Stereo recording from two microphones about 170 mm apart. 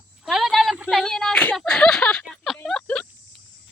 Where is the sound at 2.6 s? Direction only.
5° left (ahead or behind).